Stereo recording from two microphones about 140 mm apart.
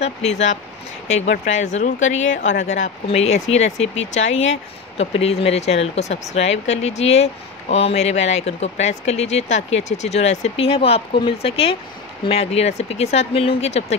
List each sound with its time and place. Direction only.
0.0 s speech: 50° left (ahead or behind)